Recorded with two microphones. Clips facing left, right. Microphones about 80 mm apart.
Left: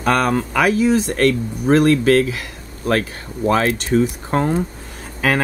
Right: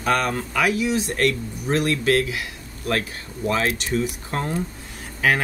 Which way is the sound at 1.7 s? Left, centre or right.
Left.